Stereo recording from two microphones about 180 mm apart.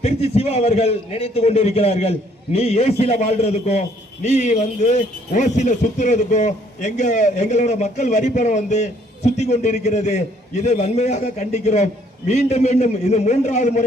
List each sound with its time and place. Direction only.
0.0 s a man's voice: 35° left (ahead or behind)